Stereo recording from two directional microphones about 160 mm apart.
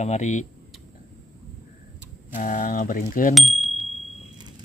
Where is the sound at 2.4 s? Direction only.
55° left (ahead or behind).